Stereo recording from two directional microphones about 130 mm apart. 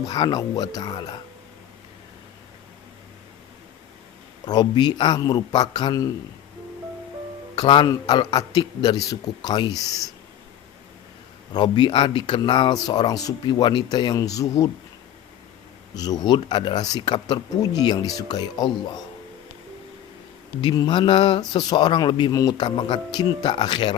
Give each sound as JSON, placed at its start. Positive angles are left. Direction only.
{"t": 0.1, "sound": "speech", "side_deg": 30}
{"t": 4.4, "sound": "speech", "side_deg": 30}
{"t": 7.5, "sound": "speech", "side_deg": 35}
{"t": 11.5, "sound": "speech", "side_deg": 35}
{"t": 16.0, "sound": "speech", "side_deg": 30}
{"t": 20.6, "sound": "speech", "side_deg": 40}